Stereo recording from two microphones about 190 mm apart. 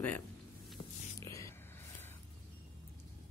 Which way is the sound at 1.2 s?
15° left (ahead or behind).